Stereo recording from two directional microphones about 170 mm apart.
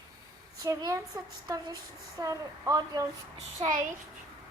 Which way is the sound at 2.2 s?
20° right (ahead or behind).